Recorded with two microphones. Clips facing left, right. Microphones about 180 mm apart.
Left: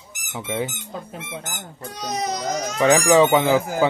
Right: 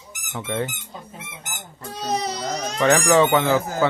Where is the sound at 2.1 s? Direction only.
30° right (ahead or behind).